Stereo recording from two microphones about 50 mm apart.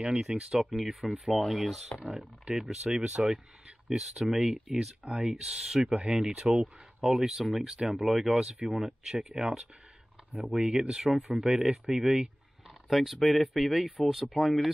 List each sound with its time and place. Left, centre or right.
0.4 s speech: centre
2.5 s speech: centre
4.7 s speech: centre
11.1 s speech: centre